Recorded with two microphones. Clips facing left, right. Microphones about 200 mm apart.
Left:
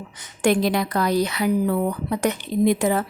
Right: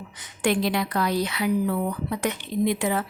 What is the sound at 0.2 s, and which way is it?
A woman's voice, 45° left (ahead or behind).